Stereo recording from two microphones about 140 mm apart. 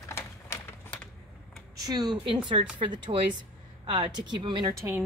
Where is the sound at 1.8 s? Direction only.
30° right (ahead or behind).